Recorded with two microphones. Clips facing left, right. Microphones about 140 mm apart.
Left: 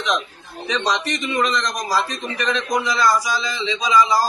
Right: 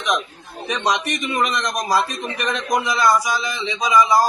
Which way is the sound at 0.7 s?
55° right (ahead or behind).